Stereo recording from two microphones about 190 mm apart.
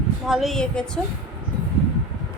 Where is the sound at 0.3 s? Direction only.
Centre (ahead or behind).